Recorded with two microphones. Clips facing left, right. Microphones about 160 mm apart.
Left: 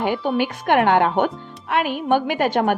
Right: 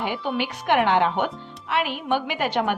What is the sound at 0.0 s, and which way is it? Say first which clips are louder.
A woman's voice: left 5 dB; 45° left (ahead or behind).